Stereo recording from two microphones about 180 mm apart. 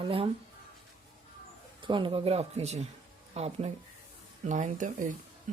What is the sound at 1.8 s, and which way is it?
Speech, 25° right (ahead or behind).